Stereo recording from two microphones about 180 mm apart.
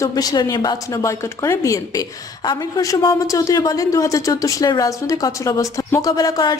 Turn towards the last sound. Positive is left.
turn(degrees=20)  # may be behind; listen again after turning